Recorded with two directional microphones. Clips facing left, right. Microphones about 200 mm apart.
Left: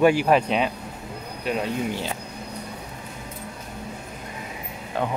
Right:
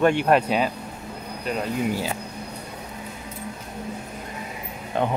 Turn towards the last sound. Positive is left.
turn(degrees=-20)  # may be behind; listen again after turning